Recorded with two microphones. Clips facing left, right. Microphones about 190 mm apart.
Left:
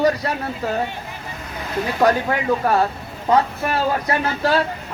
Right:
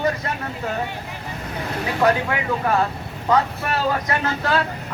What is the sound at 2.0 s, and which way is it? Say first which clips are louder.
Speech: left 2 dB; 35° left (ahead or behind).